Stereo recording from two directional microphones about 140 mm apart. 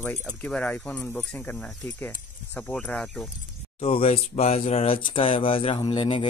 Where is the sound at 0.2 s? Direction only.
5° left (ahead or behind).